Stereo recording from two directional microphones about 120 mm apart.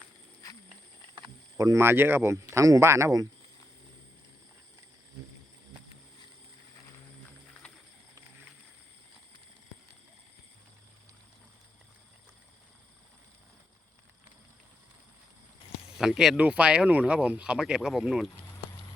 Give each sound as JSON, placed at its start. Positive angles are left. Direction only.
{"t": 1.5, "sound": "speech", "side_deg": -25}
{"t": 16.0, "sound": "speech", "side_deg": -5}